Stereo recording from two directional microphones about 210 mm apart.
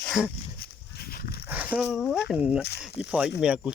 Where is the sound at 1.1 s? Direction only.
45° left (ahead or behind).